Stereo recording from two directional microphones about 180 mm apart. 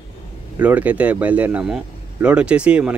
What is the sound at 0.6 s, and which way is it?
A man's voice, 10° right (ahead or behind).